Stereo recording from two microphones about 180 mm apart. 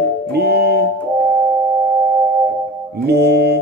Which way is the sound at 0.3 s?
65° right (ahead or behind).